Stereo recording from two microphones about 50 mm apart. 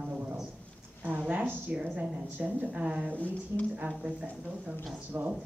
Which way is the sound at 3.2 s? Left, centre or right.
Left.